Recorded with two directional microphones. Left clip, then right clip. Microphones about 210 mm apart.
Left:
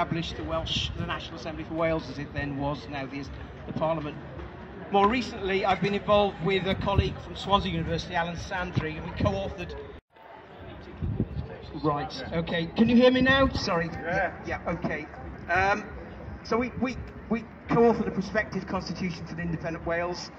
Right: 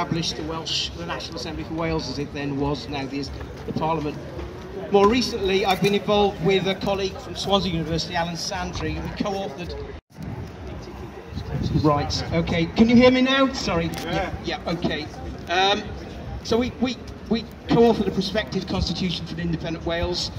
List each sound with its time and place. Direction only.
0.0 s speech: 5° right (ahead or behind)
11.8 s speech: centre (ahead or behind)
14.4 s a man's voice: 15° right (ahead or behind)